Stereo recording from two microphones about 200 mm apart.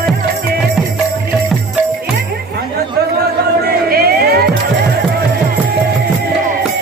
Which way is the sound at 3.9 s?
50° right (ahead or behind).